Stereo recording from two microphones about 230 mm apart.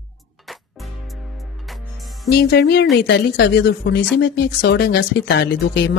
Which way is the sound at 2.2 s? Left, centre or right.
Left.